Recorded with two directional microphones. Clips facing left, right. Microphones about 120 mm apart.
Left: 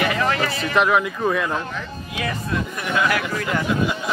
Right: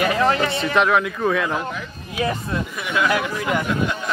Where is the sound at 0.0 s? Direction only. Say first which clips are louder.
Right 2 dB; 30° right (ahead or behind).